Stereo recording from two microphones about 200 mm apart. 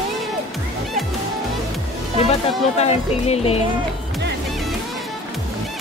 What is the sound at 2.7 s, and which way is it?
Speech, 30° left (ahead or behind).